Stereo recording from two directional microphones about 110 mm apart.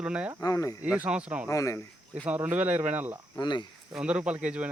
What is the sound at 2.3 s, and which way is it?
Speech, 15° right (ahead or behind).